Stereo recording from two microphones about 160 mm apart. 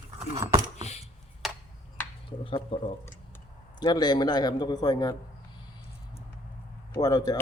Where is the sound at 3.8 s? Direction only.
25° left (ahead or behind).